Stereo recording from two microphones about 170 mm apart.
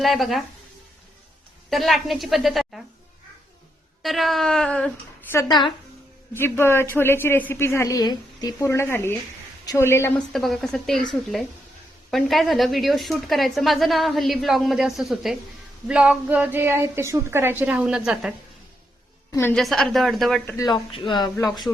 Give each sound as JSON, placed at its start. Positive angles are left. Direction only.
{"t": 0.0, "sound": "a woman's voice", "side_deg": 0}
{"t": 1.7, "sound": "a woman's voice", "side_deg": 0}
{"t": 4.0, "sound": "a woman's voice", "side_deg": 0}
{"t": 5.3, "sound": "speech", "side_deg": 20}
{"t": 6.3, "sound": "a woman's voice", "side_deg": 15}
{"t": 10.2, "sound": "a woman's voice", "side_deg": 0}
{"t": 19.3, "sound": "a woman's voice", "side_deg": 15}
{"t": 19.5, "sound": "a woman's voice", "side_deg": 5}
{"t": 20.4, "sound": "a woman's voice", "side_deg": 15}
{"t": 20.7, "sound": "speech", "side_deg": 30}